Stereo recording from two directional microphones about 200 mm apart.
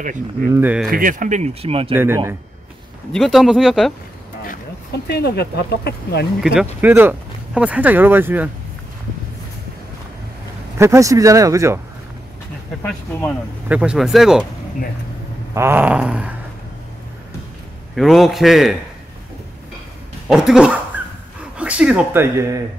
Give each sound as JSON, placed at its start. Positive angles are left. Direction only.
{"t": 0.0, "sound": "speech", "side_deg": -40}
{"t": 0.6, "sound": "speech", "side_deg": -10}
{"t": 0.8, "sound": "speech", "side_deg": -45}
{"t": 2.0, "sound": "speech", "side_deg": -10}
{"t": 3.1, "sound": "speech", "side_deg": 0}
{"t": 5.0, "sound": "speech", "side_deg": 55}
{"t": 6.4, "sound": "speech", "side_deg": -5}
{"t": 10.8, "sound": "speech", "side_deg": -15}
{"t": 12.8, "sound": "speech", "side_deg": 10}
{"t": 13.7, "sound": "speech", "side_deg": -5}
{"t": 15.5, "sound": "speech", "side_deg": -10}
{"t": 17.9, "sound": "speech", "side_deg": 0}
{"t": 20.2, "sound": "speech", "side_deg": 0}